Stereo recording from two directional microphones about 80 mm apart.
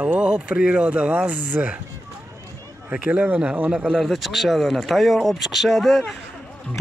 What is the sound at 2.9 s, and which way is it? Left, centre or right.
Speech, centre.